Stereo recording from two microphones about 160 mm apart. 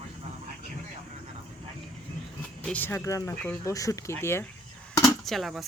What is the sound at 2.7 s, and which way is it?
Speech, 10° left (ahead or behind).